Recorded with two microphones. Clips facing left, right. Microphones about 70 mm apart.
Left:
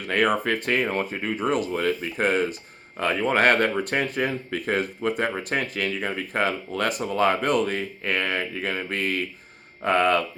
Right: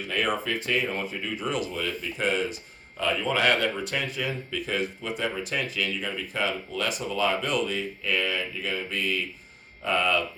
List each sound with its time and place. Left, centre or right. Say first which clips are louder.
0.0 s speech: left 5 dB; left